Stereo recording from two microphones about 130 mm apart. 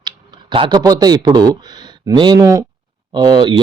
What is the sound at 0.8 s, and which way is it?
Speech, 30° right (ahead or behind).